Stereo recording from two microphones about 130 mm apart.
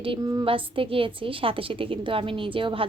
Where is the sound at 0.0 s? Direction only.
40° right (ahead or behind).